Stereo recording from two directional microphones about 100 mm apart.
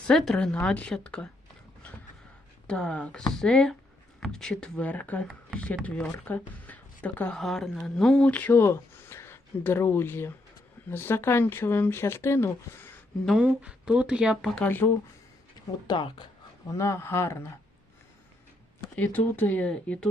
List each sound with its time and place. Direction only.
0.1 s a woman's voice: 5° left (ahead or behind)
2.6 s a woman's voice: 10° left (ahead or behind); by 12.9 s 25° left (ahead or behind)
13.4 s speech: 15° right (ahead or behind)
14.8 s speech: 25° left (ahead or behind)
15.9 s speech: 50° left (ahead or behind)
16.6 s speech: 30° left (ahead or behind)
18.9 s a woman's voice: 15° left (ahead or behind)